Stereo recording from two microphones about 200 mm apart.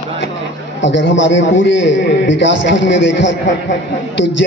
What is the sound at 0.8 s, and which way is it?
A man's voice, 65° left (ahead or behind).